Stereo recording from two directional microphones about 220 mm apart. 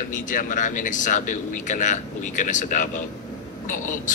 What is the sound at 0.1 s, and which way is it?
Speech, 35° left (ahead or behind).